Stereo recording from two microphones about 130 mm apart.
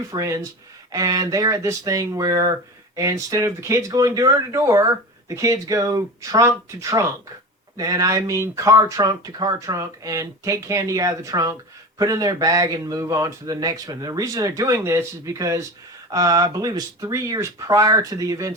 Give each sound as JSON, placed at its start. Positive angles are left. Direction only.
{"t": 0.1, "sound": "speech", "side_deg": -25}